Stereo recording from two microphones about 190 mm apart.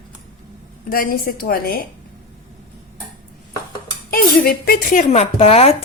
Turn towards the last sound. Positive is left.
turn(degrees=30)  # may be behind; listen again after turning